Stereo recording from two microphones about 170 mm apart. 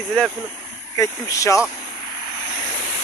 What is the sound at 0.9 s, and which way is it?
Speech, 20° left (ahead or behind).